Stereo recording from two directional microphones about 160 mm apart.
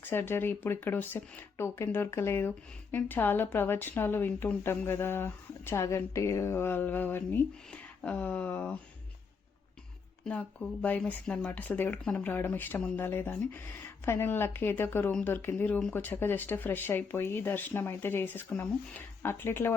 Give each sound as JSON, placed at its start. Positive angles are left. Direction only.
{"t": 0.0, "sound": "speech", "side_deg": 15}
{"t": 10.8, "sound": "speech", "side_deg": 10}